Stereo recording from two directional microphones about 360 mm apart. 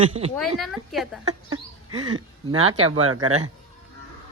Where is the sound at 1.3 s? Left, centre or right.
Right.